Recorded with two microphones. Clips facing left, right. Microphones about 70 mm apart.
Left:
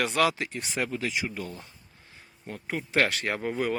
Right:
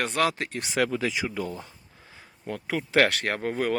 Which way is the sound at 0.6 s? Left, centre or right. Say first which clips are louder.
Right 8 dB; right.